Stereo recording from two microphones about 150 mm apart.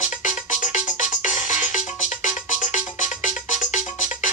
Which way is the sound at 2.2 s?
55° left (ahead or behind).